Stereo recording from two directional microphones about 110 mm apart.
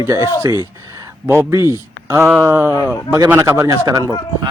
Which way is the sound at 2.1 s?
15° right (ahead or behind).